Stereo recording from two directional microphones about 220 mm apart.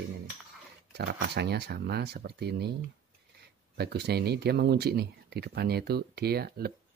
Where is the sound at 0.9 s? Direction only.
50° right (ahead or behind).